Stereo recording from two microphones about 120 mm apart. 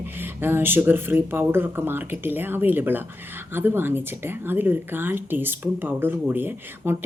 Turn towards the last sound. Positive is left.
turn(degrees=-15)  # may be behind; listen again after turning